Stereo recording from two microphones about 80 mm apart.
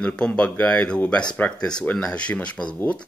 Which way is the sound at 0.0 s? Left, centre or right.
Centre.